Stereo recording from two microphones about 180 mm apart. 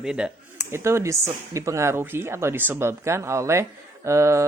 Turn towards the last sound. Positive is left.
turn(degrees=-15)  # may be behind; listen again after turning